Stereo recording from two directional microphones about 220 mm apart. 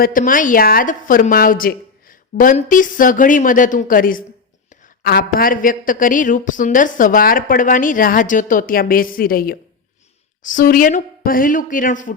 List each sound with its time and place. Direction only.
0.0 s a woman's voice: 40° left (ahead or behind)